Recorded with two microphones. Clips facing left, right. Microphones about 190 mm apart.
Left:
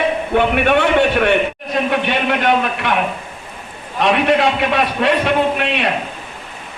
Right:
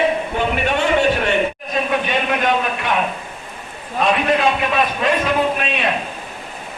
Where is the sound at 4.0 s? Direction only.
70° left (ahead or behind).